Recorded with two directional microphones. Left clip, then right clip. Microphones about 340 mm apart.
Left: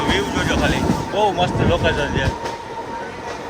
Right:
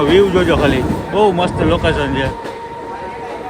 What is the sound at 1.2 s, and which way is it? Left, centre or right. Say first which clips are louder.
Vehicle: right 5 dB; right.